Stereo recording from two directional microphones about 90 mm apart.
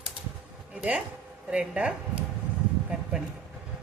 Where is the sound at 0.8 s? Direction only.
15° right (ahead or behind).